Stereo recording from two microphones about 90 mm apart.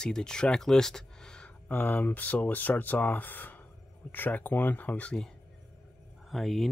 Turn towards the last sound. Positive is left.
turn(degrees=0)  # may be behind; listen again after turning